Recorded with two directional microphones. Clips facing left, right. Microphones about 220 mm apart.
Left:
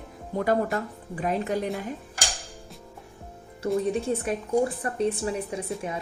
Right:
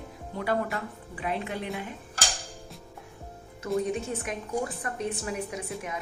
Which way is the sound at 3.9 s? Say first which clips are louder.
Left 6 dB; 30° left (ahead or behind).